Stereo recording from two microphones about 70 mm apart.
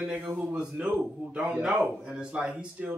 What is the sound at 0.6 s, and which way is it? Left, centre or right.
Speech, centre.